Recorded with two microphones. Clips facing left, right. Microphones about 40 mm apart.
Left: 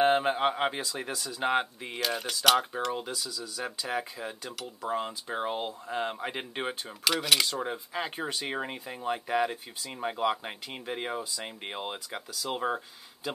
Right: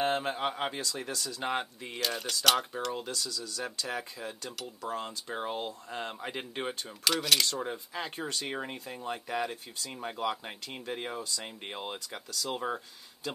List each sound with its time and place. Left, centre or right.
0.0 s speech: left